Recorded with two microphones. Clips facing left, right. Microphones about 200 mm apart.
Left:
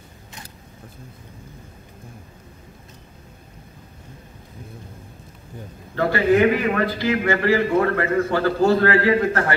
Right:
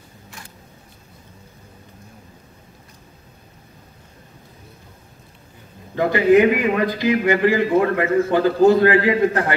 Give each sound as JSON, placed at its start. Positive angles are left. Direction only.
{"t": 5.9, "sound": "a man's voice", "side_deg": -20}